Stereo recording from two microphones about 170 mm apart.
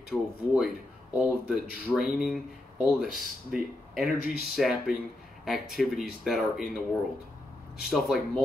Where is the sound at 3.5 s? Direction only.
Centre (ahead or behind).